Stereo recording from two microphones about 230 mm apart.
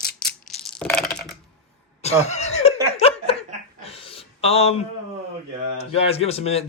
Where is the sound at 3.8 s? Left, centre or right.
Left.